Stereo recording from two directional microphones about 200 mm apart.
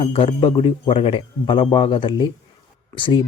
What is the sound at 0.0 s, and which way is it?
A man's voice, 30° left (ahead or behind).